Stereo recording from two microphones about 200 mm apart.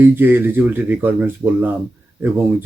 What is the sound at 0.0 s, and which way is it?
Speech, 10° right (ahead or behind).